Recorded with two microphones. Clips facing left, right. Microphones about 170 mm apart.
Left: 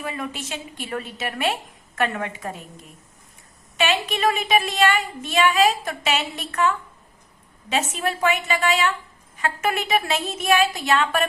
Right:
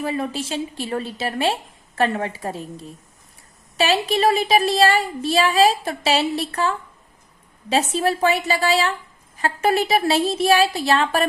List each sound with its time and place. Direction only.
0.0 s speech: 30° right (ahead or behind)